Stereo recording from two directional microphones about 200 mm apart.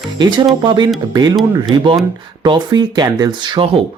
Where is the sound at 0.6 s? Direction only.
25° right (ahead or behind).